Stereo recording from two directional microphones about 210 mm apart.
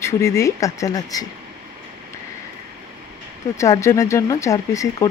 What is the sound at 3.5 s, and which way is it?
Speech, 15° left (ahead or behind).